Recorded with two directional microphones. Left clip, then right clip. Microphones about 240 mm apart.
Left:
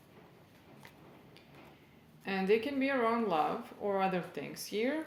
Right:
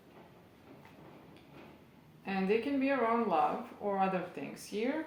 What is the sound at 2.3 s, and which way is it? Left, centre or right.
A woman's voice, left.